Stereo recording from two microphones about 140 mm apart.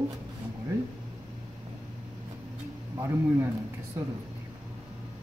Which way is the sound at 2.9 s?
20° right (ahead or behind).